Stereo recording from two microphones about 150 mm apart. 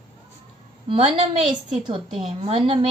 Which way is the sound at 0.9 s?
40° right (ahead or behind).